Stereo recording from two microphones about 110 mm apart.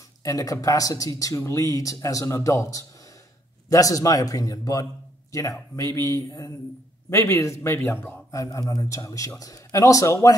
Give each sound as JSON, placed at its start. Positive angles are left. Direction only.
{"t": 0.2, "sound": "speech", "side_deg": 30}
{"t": 8.4, "sound": "speech", "side_deg": 30}